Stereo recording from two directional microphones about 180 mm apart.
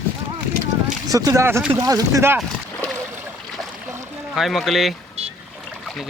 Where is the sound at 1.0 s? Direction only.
20° right (ahead or behind).